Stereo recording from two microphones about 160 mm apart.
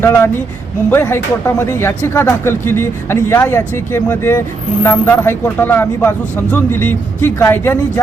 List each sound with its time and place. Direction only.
0.9 s speech: 15° left (ahead or behind)